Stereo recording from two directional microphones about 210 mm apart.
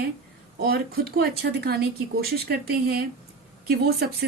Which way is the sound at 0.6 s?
45° right (ahead or behind).